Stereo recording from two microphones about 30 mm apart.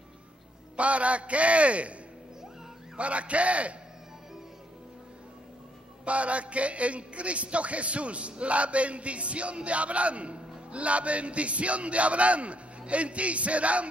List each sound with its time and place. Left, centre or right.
0.7 s a man's voice: right
3.0 s a man's voice: right
6.0 s a man's voice: right